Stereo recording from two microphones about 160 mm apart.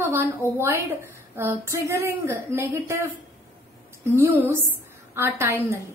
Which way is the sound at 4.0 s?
15° right (ahead or behind).